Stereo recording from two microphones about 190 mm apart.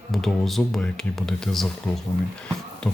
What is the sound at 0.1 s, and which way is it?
Speech, centre (ahead or behind).